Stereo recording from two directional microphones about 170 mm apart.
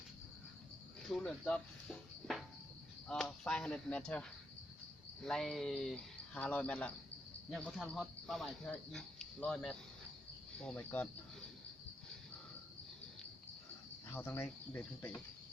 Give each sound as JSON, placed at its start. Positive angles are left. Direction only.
{"t": 1.0, "sound": "speech", "side_deg": 5}
{"t": 14.1, "sound": "speech", "side_deg": 15}